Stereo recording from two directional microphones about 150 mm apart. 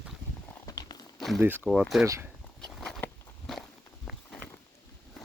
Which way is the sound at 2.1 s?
20° right (ahead or behind).